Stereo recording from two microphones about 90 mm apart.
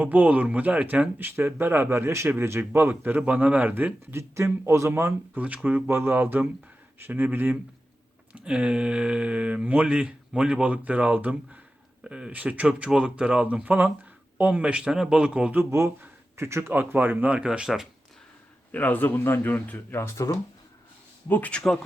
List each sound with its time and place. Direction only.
0.0 s a man's voice: 15° right (ahead or behind)
15.7 s a man's voice: 30° right (ahead or behind); by 17.8 s 5° right (ahead or behind)
18.7 s speech: 20° left (ahead or behind)
21.2 s speech: 20° left (ahead or behind)